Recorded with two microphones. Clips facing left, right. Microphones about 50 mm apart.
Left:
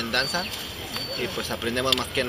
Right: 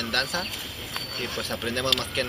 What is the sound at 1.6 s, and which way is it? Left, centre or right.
Speech, centre.